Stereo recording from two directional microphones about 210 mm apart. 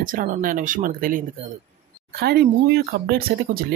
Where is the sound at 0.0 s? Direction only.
40° right (ahead or behind).